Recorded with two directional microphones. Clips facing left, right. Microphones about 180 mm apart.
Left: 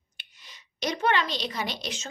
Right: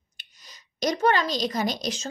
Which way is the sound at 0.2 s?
40° right (ahead or behind).